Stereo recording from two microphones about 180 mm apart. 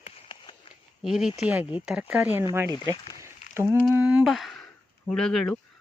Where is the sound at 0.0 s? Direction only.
30° left (ahead or behind).